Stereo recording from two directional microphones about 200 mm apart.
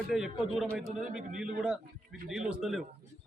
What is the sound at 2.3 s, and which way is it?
Speech, 5° right (ahead or behind).